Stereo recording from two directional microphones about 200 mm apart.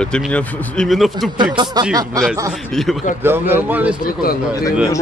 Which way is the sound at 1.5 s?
20° right (ahead or behind).